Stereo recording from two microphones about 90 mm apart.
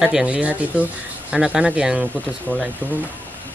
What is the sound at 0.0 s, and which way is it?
Speech, 10° right (ahead or behind).